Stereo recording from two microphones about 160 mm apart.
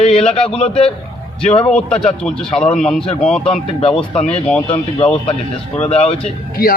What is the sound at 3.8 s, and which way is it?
Speech, 35° left (ahead or behind).